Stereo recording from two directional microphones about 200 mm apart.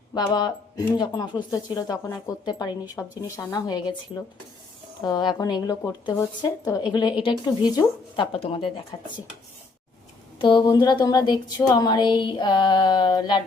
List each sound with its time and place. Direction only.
0.1 s speech: 20° left (ahead or behind)
5.0 s speech: 20° left (ahead or behind)
10.3 s speech: 25° left (ahead or behind)